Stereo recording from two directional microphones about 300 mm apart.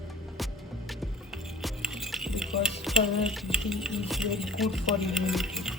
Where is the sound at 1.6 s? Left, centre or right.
Centre.